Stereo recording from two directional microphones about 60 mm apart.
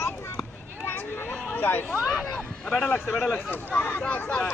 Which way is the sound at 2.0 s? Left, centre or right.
Centre.